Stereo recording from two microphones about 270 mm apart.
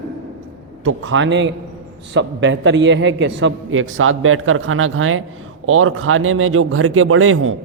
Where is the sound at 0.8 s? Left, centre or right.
Right.